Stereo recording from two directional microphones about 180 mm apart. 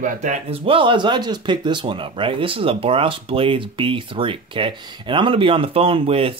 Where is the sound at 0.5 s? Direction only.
30° right (ahead or behind).